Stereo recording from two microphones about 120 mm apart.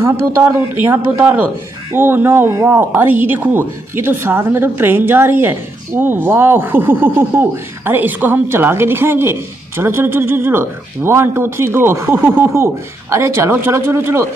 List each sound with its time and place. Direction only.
0.0 s speech: 20° right (ahead or behind)